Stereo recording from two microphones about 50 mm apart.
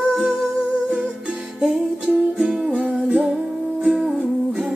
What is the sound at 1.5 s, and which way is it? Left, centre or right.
Music, centre.